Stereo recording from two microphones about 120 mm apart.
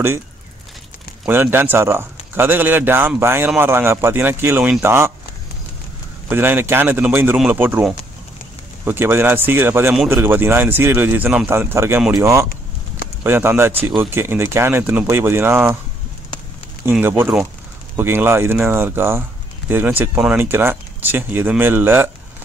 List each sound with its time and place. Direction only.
1.2 s speech: 20° right (ahead or behind)
6.2 s speech: 15° right (ahead or behind)
8.8 s speech: 20° right (ahead or behind)
17.0 s speech: 20° right (ahead or behind)